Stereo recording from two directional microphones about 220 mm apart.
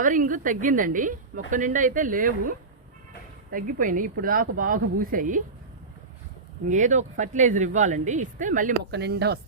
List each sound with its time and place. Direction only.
0.0 s a woman's voice: 35° right (ahead or behind)
6.7 s a woman's voice: 35° right (ahead or behind)
8.9 s speech: 50° right (ahead or behind)